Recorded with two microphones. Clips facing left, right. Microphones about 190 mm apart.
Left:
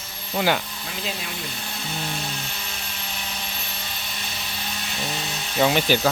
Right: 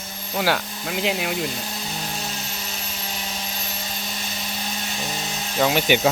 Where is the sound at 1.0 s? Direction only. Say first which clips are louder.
Right 8 dB; 70° right (ahead or behind).